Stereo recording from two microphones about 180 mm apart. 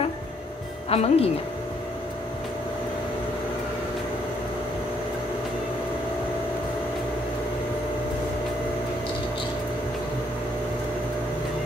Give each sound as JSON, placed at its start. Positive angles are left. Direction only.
{"t": 0.8, "sound": "speech", "side_deg": 35}